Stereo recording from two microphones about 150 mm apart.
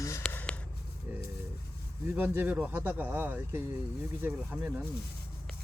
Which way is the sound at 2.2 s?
10° right (ahead or behind).